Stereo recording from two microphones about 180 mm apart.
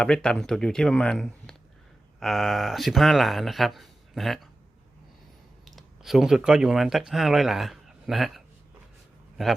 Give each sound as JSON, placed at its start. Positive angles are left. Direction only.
{"t": 0.0, "sound": "speech", "side_deg": 5}
{"t": 5.6, "sound": "speech", "side_deg": 0}